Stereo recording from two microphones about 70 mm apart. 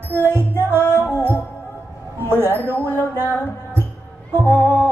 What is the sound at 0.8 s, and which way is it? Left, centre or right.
Music, left.